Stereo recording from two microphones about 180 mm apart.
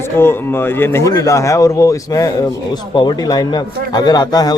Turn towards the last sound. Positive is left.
turn(degrees=20)  # may be behind; listen again after turning